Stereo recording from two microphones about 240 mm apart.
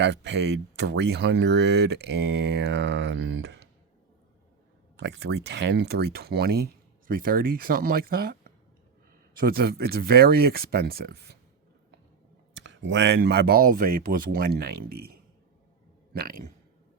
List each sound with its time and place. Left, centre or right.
0.0 s speech: right
4.9 s speech: right
12.6 s speech: right
16.1 s speech: right